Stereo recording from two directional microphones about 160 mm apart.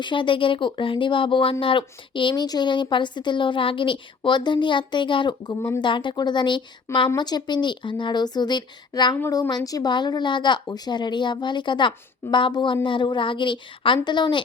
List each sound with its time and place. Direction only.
0.0 s speech: 30° left (ahead or behind)
9.1 s speech: 15° left (ahead or behind)